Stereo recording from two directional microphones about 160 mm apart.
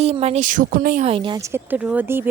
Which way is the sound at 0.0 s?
40° right (ahead or behind).